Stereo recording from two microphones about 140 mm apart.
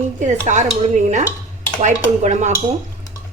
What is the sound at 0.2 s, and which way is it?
Speech, 60° right (ahead or behind).